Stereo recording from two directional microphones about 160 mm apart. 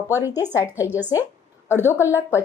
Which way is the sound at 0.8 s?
10° right (ahead or behind).